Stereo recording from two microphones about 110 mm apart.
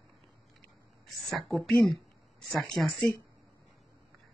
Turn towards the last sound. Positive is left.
turn(degrees=0)  # may be behind; listen again after turning